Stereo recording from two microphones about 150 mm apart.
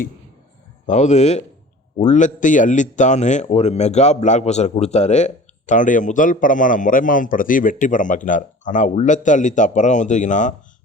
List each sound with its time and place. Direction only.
0.9 s a man's voice: 50° left (ahead or behind)